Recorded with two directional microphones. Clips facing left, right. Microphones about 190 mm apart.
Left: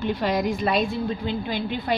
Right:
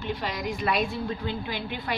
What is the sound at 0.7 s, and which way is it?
Speech, 30° left (ahead or behind).